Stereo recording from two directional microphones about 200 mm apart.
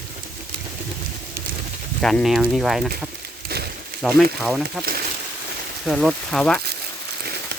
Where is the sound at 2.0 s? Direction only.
Centre (ahead or behind).